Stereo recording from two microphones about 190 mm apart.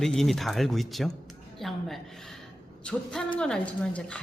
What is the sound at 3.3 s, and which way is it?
Speech, 5° left (ahead or behind).